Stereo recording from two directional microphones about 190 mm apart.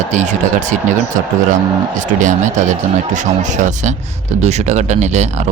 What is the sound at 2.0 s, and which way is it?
Speech, 40° right (ahead or behind).